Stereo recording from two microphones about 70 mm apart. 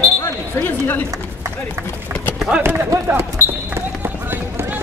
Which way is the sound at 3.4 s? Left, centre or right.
Right.